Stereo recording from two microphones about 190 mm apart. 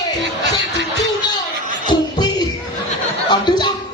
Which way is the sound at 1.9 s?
20° left (ahead or behind).